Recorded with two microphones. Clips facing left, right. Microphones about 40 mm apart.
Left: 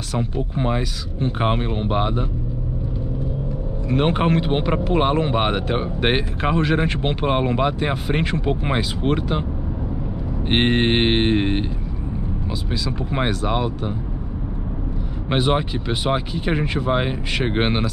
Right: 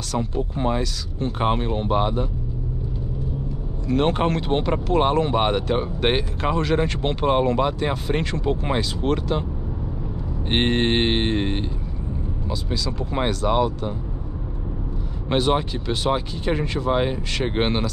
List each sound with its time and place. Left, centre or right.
0.1 s speech: centre
3.9 s speech: centre
10.5 s speech: centre
12.8 s speech: centre
15.2 s speech: centre